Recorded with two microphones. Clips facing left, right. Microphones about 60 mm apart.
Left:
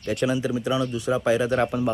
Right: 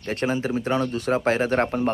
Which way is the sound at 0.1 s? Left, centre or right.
Right.